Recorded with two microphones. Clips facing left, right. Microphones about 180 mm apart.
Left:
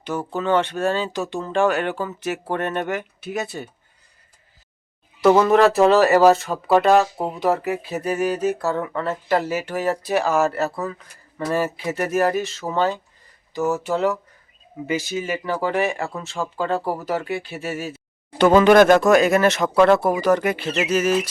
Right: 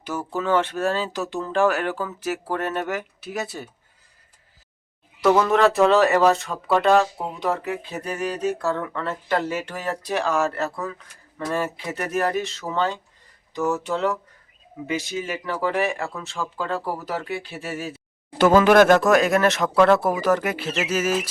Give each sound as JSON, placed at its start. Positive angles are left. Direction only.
{"t": 0.0, "sound": "speech", "side_deg": -5}
{"t": 5.2, "sound": "speech", "side_deg": 0}